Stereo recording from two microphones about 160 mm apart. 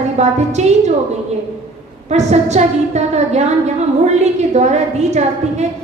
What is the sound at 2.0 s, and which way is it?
A woman's voice, 45° right (ahead or behind).